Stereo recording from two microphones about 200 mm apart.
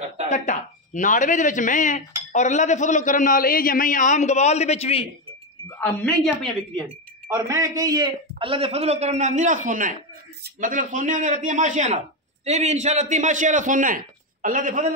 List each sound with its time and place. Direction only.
0.3 s speech: 40° left (ahead or behind)
5.8 s a woman's voice: 5° left (ahead or behind)
7.2 s a man's voice: 15° right (ahead or behind); by 15.0 s 40° right (ahead or behind)